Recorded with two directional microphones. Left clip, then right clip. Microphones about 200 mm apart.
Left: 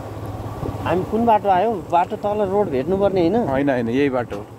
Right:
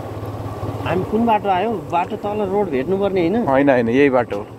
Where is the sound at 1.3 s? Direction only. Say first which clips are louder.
Left 2 dB; 10° left (ahead or behind).